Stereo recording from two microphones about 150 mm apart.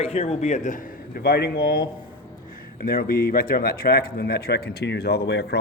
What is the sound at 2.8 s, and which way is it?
Speech, 80° left.